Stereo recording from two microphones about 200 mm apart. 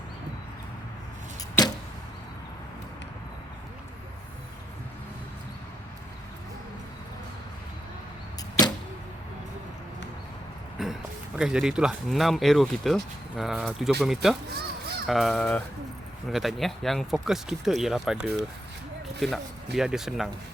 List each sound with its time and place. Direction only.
8.4 s arrow: 20° left (ahead or behind)
10.8 s a sound: centre (ahead or behind)
11.3 s speech: 5° right (ahead or behind)
14.5 s honk: 50° right (ahead or behind)
15.0 s speech: centre (ahead or behind)